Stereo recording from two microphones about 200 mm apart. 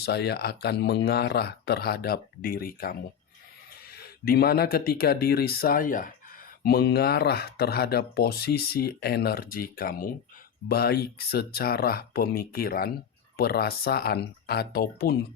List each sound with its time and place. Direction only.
0.0 s speech: 55° left (ahead or behind)